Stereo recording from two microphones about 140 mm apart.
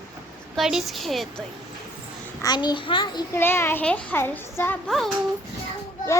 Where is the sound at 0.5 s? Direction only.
Centre (ahead or behind).